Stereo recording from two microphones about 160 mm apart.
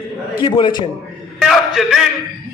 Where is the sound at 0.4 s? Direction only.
30° left (ahead or behind).